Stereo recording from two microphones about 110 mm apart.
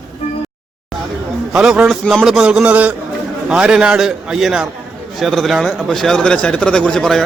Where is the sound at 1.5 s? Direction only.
5° right (ahead or behind).